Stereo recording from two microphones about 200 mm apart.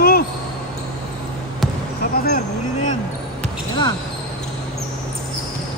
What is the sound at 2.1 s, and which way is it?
Speech, 50° left (ahead or behind).